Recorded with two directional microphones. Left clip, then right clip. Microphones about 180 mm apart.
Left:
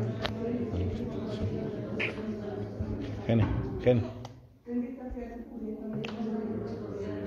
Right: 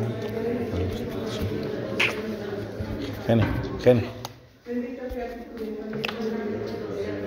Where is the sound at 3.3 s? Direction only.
20° right (ahead or behind).